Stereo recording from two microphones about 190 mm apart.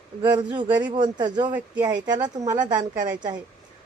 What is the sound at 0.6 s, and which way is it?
Speech, 10° right (ahead or behind).